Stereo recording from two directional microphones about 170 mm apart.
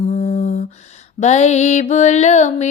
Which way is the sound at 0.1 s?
40° left (ahead or behind).